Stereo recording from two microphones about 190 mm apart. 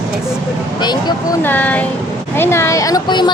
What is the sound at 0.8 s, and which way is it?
Speech, 20° left (ahead or behind).